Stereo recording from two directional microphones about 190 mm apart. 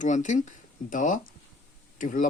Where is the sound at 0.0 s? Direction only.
40° left (ahead or behind).